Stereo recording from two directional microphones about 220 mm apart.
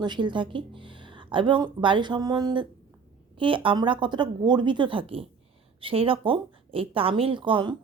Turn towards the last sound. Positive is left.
turn(degrees=-20)  # may be behind; listen again after turning